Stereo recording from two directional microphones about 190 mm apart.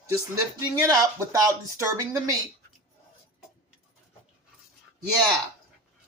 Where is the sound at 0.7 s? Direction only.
20° right (ahead or behind).